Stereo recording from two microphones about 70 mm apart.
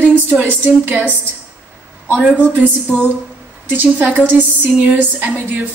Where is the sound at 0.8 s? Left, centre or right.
Right.